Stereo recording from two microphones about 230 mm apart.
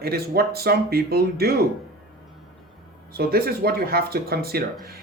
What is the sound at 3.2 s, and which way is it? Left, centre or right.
Speech, right.